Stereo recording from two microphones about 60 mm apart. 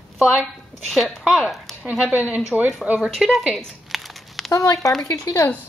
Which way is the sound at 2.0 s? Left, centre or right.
Centre.